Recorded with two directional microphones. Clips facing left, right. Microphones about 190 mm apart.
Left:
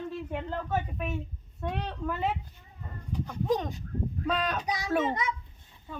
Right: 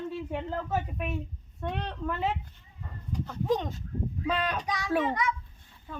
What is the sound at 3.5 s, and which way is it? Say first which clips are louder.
Speech: right 1 dB; centre (ahead or behind).